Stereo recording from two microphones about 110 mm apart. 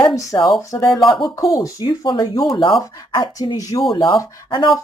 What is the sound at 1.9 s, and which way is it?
Speech, 45° left (ahead or behind).